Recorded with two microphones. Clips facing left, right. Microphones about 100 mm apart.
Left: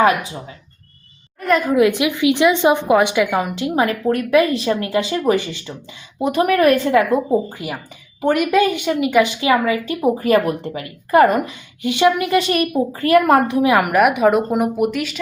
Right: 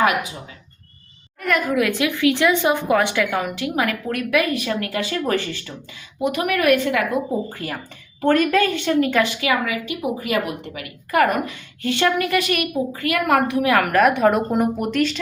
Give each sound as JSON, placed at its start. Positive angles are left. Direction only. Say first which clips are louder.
{"t": 0.0, "sound": "a woman's voice", "louder": "left 4 dB", "side_deg": 30}
{"t": 1.4, "sound": "a woman's voice", "louder": "left 5 dB", "side_deg": 25}
{"t": 6.1, "sound": "a woman's voice", "louder": "left 5 dB", "side_deg": 30}
{"t": 8.2, "sound": "a woman's voice", "louder": "left 2 dB", "side_deg": 15}